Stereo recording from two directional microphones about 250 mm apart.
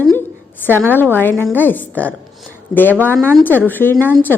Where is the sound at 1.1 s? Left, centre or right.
Centre.